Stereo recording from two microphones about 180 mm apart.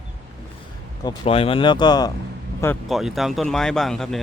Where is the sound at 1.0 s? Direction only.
30° left (ahead or behind).